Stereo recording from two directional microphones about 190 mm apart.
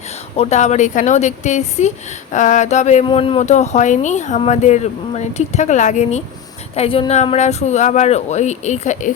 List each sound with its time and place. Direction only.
0.3 s speech: 35° left (ahead or behind)